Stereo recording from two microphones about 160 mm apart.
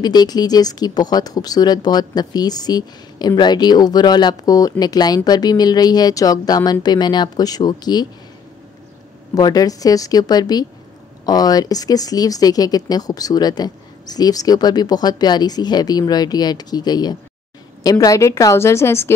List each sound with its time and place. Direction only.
0.0 s a woman's voice: 25° left (ahead or behind)
9.3 s a woman's voice: 25° left (ahead or behind)